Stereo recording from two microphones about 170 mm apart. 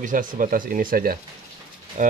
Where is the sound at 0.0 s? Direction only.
50° right (ahead or behind).